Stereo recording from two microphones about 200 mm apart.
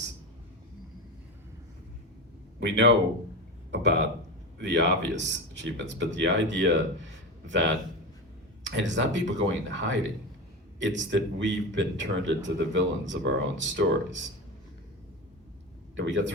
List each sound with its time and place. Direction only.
2.6 s a man's voice: 65° right (ahead or behind)
16.0 s speech: 65° right (ahead or behind)